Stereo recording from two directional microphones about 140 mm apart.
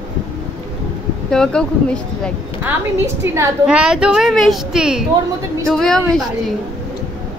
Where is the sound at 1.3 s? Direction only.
5° left (ahead or behind).